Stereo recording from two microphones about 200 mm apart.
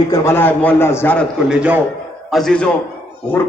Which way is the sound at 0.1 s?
10° left (ahead or behind).